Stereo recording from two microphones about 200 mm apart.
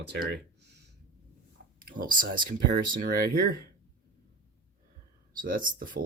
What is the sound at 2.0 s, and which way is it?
Speech, 45° right (ahead or behind).